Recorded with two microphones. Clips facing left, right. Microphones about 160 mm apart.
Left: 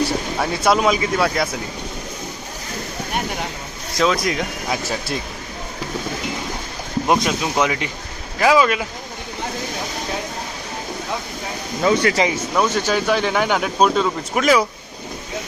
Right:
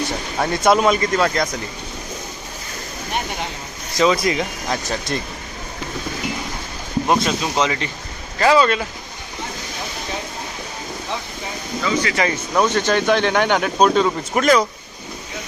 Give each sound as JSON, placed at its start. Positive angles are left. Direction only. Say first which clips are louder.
{"t": 0.3, "sound": "speech", "louder": "right 3 dB", "side_deg": 0}
{"t": 3.9, "sound": "speech", "louder": "right 2 dB", "side_deg": 0}
{"t": 7.1, "sound": "speech", "louder": "left 1 dB", "side_deg": 10}
{"t": 11.8, "sound": "speech", "louder": "left 5 dB", "side_deg": 50}
{"t": 12.3, "sound": "speech", "louder": "right 1 dB", "side_deg": 5}